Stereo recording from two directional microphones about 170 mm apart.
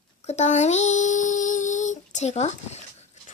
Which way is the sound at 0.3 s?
40° left (ahead or behind).